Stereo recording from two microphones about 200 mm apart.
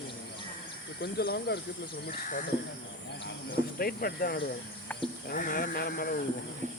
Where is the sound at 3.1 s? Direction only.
55° left (ahead or behind).